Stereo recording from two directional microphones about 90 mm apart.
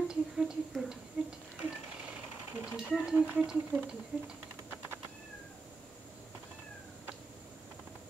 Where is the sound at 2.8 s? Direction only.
5° right (ahead or behind).